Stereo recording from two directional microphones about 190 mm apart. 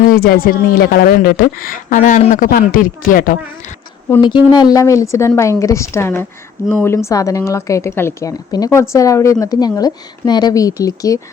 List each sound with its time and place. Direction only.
0.1 s a woman's voice: 50° left (ahead or behind)
4.2 s a woman's voice: 25° left (ahead or behind)